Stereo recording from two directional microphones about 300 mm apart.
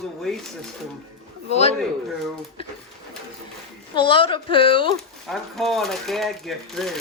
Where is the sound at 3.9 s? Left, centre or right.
Centre.